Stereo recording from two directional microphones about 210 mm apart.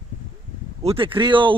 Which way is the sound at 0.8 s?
25° right (ahead or behind).